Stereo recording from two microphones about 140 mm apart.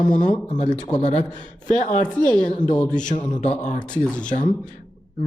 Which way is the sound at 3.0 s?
60° left (ahead or behind).